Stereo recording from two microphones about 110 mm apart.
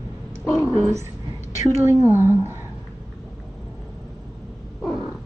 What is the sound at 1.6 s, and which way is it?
Speech, 25° right (ahead or behind).